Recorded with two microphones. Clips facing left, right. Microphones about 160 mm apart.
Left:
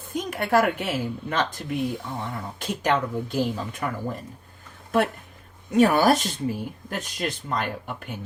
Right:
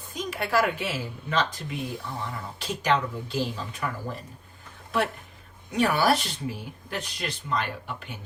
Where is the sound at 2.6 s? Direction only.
50° left (ahead or behind).